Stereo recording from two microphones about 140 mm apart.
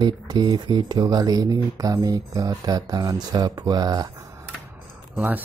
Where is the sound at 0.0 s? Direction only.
35° right (ahead or behind).